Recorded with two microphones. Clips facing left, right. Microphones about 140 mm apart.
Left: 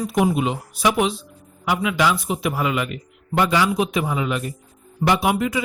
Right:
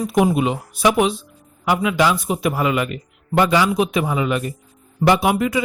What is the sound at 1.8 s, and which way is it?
A man's voice, 40° right (ahead or behind).